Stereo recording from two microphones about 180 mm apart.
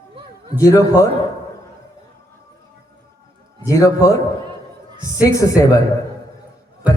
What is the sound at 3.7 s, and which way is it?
Speech, 20° left (ahead or behind).